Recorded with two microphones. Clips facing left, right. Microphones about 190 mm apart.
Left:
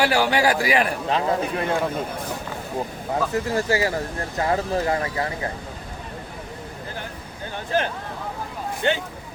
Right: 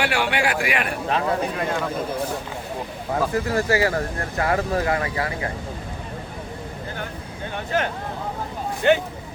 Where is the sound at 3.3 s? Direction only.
20° left (ahead or behind).